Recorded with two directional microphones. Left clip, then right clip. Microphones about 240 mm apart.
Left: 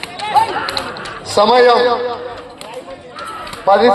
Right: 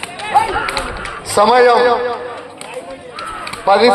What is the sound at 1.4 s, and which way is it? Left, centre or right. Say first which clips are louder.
Speech: even; right.